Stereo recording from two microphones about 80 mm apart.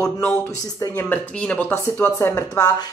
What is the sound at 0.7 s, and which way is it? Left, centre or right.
Speech, left.